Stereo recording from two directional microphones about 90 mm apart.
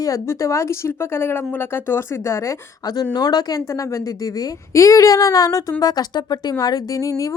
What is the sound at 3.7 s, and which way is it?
A woman's voice, 35° left (ahead or behind).